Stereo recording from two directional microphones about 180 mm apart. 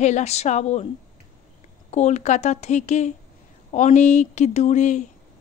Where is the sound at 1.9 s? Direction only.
40° left (ahead or behind).